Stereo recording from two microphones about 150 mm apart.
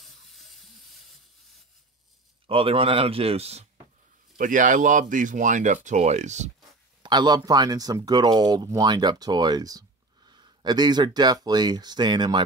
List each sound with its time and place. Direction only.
0.0 s a sound: centre (ahead or behind)
2.4 s speech: 40° right (ahead or behind)
4.4 s speech: 60° right (ahead or behind)
7.0 s speech: 30° right (ahead or behind)